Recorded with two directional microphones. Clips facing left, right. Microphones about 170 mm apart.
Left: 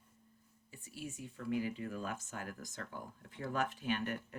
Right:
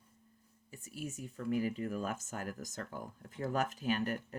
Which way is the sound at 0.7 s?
45° right (ahead or behind).